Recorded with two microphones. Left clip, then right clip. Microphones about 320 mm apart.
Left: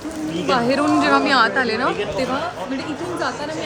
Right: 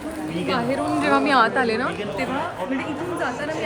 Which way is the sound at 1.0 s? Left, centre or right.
Centre.